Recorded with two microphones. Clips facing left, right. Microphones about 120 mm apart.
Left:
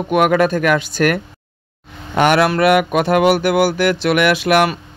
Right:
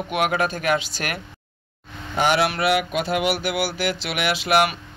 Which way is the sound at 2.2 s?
55° left (ahead or behind).